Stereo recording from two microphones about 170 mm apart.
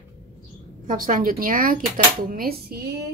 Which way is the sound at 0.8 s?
55° right (ahead or behind).